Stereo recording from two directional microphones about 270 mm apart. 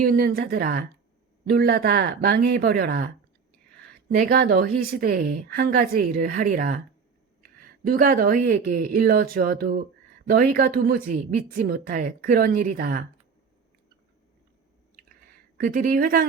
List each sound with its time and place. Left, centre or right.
0.0 s a woman's voice: right
4.1 s a woman's voice: right
15.5 s a woman's voice: right